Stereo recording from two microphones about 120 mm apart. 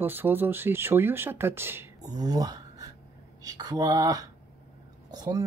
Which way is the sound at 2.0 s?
35° right (ahead or behind).